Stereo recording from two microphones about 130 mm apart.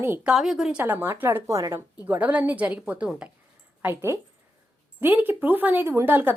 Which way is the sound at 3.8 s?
20° right (ahead or behind).